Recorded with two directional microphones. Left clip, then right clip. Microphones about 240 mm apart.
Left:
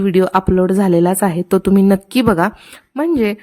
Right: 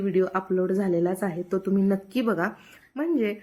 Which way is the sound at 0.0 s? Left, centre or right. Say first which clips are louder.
Left 11 dB; left.